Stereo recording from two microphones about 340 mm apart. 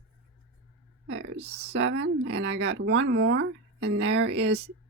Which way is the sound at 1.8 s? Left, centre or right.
Right.